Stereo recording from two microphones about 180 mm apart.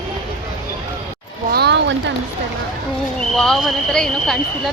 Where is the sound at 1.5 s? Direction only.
70° right (ahead or behind).